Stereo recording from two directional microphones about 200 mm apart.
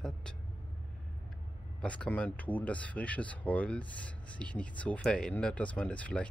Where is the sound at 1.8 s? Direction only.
5° left (ahead or behind).